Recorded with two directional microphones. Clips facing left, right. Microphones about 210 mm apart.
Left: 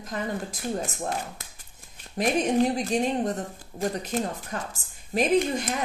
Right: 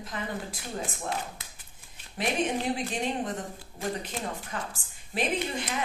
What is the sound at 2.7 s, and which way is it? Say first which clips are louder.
A woman's voice: left 6 dB; 40° left (ahead or behind).